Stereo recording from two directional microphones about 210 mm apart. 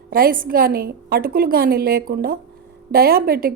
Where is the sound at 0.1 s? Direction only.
45° right (ahead or behind).